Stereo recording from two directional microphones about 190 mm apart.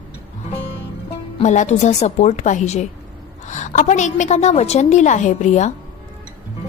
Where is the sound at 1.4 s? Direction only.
40° left (ahead or behind).